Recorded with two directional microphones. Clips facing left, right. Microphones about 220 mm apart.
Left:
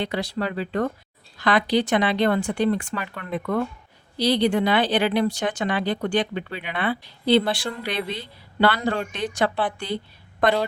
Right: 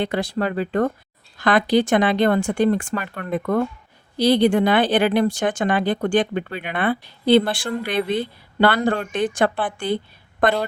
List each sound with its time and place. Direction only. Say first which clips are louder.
0.0 s speech: right 4 dB; 50° right (ahead or behind)